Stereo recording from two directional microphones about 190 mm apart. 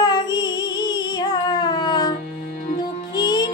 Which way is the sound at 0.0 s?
20° left (ahead or behind).